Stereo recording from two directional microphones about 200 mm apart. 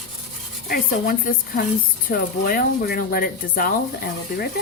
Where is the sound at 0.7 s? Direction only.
45° left (ahead or behind).